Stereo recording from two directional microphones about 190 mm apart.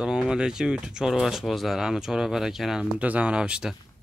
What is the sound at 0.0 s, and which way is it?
Speech, 5° right (ahead or behind).